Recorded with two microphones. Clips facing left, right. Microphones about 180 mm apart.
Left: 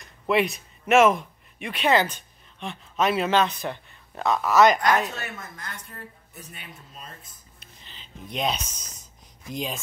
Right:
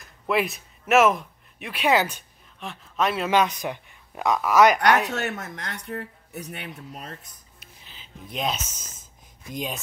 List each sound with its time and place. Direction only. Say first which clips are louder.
0.0 s speech: left 2 dB; centre (ahead or behind)
3.3 s speech: right 1 dB; 10° right (ahead or behind)
5.0 s speech: right 6 dB; 75° right (ahead or behind)
7.6 s a sound: even; 5° right (ahead or behind)